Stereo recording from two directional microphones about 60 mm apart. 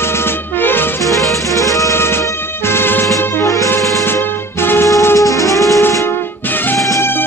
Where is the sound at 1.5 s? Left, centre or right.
Left.